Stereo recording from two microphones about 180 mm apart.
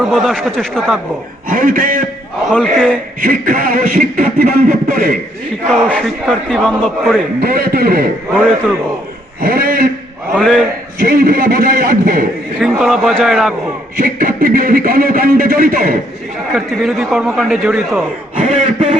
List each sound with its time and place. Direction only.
0.0 s a man's voice: centre (ahead or behind)
1.5 s a man's voice: 50° right (ahead or behind)
2.5 s a man's voice: 5° left (ahead or behind)
3.2 s a man's voice: 50° right (ahead or behind)
5.6 s a man's voice: centre (ahead or behind)
7.3 s a man's voice: 55° right (ahead or behind)
9.4 s a man's voice: 55° right (ahead or behind)
10.3 s a man's voice: centre (ahead or behind)
11.0 s a man's voice: 55° right (ahead or behind)
12.5 s a man's voice: centre (ahead or behind)
13.9 s a man's voice: 50° right (ahead or behind)
16.6 s a man's voice: centre (ahead or behind)
18.3 s a man's voice: 45° right (ahead or behind)